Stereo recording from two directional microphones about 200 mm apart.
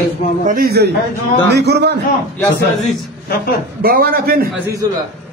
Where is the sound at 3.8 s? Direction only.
50° right (ahead or behind).